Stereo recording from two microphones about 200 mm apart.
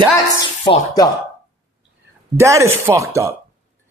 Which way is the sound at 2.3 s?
15° right (ahead or behind).